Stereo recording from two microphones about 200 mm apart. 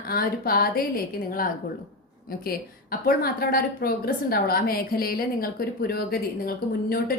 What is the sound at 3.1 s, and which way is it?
A woman's voice, 50° left (ahead or behind).